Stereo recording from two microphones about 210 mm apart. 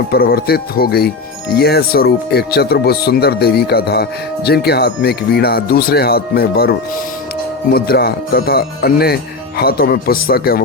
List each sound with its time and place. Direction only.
0.1 s speech: 45° left (ahead or behind)